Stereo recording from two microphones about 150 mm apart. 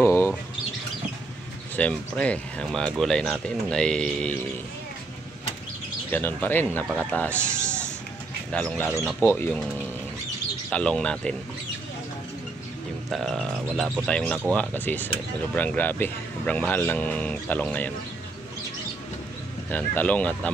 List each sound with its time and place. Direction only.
0.0 s bird: 15° left (ahead or behind)
1.8 s speech: 10° left (ahead or behind)
6.1 s speech: 10° left (ahead or behind)
10.7 s speech: 5° left (ahead or behind)
13.1 s speech: centre (ahead or behind)
19.7 s speech: 10° left (ahead or behind)